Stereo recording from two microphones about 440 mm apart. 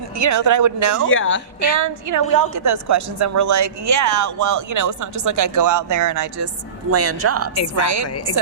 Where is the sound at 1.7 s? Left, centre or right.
Right.